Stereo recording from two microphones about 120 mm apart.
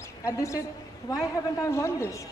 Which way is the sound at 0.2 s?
25° left (ahead or behind).